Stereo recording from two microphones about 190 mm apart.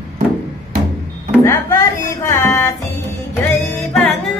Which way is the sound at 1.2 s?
15° left (ahead or behind).